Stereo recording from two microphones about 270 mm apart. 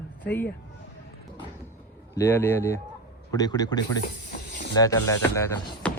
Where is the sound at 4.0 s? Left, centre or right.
Left.